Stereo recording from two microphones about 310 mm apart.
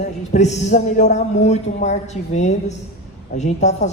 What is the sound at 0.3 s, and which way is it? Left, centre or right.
Speech, left.